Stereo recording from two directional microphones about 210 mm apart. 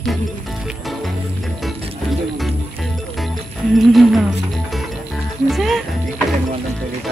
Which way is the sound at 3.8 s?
Centre (ahead or behind).